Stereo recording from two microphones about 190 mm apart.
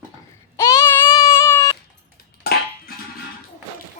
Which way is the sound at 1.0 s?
15° left (ahead or behind).